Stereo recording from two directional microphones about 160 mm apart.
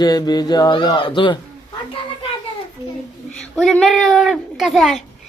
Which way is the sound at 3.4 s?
5° left (ahead or behind).